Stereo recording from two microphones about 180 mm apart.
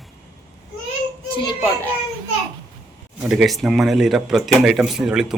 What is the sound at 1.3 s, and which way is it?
Speech, 30° left (ahead or behind).